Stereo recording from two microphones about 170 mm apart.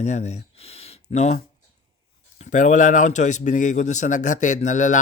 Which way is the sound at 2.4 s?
45° left (ahead or behind).